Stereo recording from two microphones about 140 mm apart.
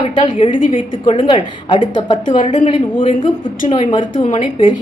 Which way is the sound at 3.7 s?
40° left (ahead or behind).